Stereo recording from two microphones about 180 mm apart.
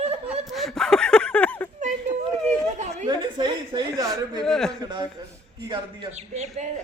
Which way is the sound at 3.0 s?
25° right (ahead or behind).